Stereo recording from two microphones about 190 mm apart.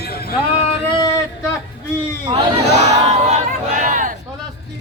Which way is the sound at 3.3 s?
40° right (ahead or behind).